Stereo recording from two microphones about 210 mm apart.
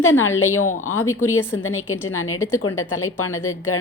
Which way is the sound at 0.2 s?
75° left (ahead or behind).